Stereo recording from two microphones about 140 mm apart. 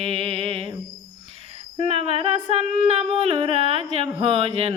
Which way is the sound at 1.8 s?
45° right (ahead or behind).